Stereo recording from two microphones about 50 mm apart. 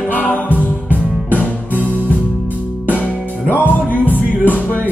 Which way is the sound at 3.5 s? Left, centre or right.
Left.